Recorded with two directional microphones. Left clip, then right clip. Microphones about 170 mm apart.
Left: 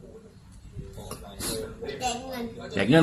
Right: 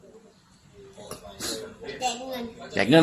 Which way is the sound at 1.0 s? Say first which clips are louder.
Right 2 dB; 10° right (ahead or behind).